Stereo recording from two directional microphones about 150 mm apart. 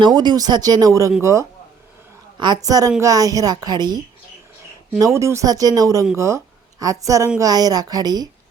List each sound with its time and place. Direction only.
0.0 s speech: 30° right (ahead or behind)